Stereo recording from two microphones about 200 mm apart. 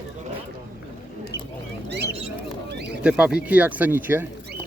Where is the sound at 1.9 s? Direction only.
55° right (ahead or behind).